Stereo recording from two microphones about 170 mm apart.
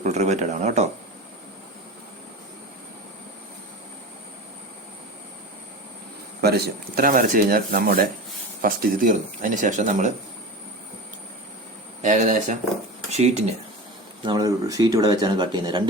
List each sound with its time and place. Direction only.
0.0 s speech: 40° right (ahead or behind)
6.4 s speech: 65° right (ahead or behind); by 10.1 s 45° right (ahead or behind)
12.0 s speech: 45° right (ahead or behind)
14.3 s speech: 20° right (ahead or behind)